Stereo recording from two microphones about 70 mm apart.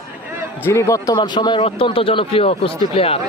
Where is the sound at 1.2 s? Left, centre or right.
Left.